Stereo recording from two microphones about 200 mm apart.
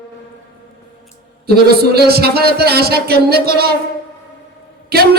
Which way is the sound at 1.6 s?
50° right (ahead or behind).